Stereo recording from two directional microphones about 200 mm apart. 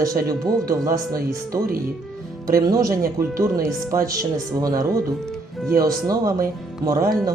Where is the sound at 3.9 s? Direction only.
15° right (ahead or behind).